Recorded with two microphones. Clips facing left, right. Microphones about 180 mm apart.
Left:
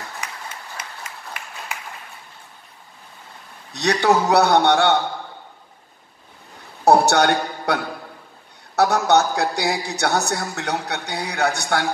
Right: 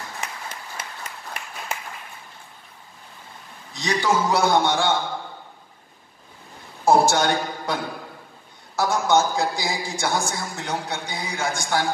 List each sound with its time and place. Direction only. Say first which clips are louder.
3.7 s speech: left 4 dB; 70° left (ahead or behind)
6.8 s a woman's voice: left 3 dB; 70° left (ahead or behind)